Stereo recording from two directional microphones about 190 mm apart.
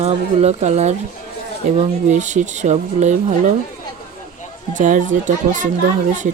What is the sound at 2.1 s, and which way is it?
A woman's voice, 40° right (ahead or behind).